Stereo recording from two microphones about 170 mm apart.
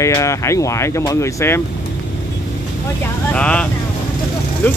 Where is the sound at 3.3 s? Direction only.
5° left (ahead or behind).